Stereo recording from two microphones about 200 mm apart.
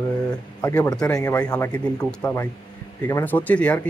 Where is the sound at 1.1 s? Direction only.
15° left (ahead or behind).